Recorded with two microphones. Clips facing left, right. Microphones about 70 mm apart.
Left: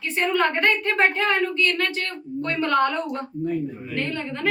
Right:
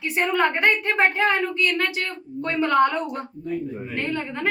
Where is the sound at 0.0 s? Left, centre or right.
Centre.